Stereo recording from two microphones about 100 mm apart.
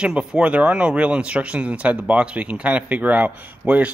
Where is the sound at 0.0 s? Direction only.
5° right (ahead or behind).